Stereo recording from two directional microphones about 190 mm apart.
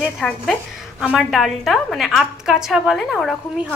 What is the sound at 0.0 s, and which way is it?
A woman's voice, centre (ahead or behind).